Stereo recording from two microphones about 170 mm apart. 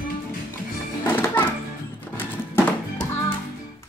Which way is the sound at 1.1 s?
10° left (ahead or behind).